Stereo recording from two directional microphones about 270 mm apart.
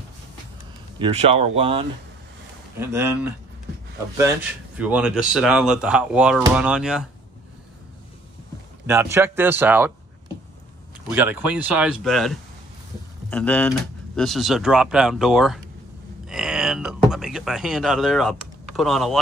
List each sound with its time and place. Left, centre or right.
0.9 s speech: right
2.8 s speech: centre
8.8 s speech: centre
11.1 s speech: centre
16.3 s a sound: centre
17.1 s speech: centre